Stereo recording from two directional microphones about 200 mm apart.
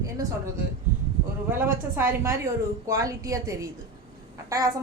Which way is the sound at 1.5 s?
10° right (ahead or behind).